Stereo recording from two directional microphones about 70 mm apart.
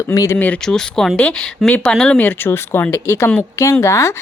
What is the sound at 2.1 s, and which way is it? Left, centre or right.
Speech, left.